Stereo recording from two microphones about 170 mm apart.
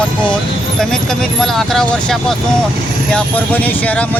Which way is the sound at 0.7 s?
5° left (ahead or behind).